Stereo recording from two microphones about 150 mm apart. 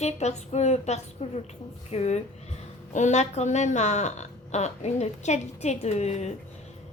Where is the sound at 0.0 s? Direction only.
45° left (ahead or behind).